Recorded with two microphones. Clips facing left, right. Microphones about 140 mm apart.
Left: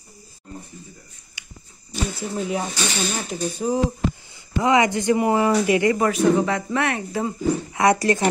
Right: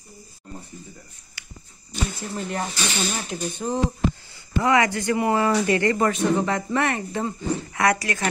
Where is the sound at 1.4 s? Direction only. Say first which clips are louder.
Even; 20° left (ahead or behind).